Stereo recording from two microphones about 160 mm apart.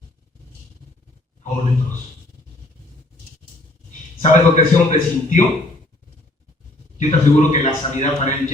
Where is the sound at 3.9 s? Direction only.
50° left (ahead or behind).